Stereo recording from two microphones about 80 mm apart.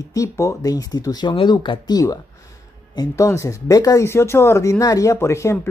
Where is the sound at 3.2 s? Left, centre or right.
Left.